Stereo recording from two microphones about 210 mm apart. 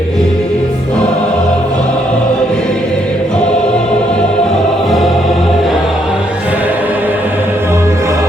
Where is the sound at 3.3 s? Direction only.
5° left (ahead or behind).